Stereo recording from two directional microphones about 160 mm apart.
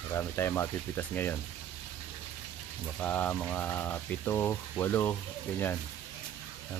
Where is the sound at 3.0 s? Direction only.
10° left (ahead or behind).